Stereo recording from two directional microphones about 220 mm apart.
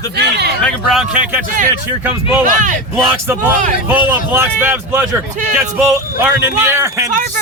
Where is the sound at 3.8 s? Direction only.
10° right (ahead or behind).